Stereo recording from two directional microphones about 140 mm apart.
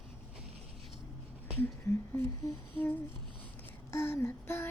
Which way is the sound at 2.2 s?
15° left (ahead or behind).